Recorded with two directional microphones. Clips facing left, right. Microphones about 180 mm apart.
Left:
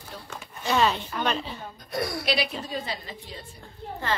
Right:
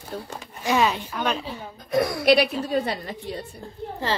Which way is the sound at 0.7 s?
10° right (ahead or behind).